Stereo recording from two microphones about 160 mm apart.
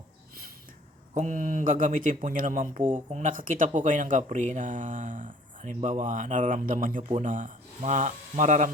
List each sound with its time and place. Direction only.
1.1 s speech: 55° right (ahead or behind)